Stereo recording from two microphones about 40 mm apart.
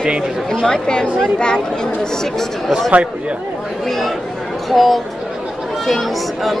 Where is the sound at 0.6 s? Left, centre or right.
Centre.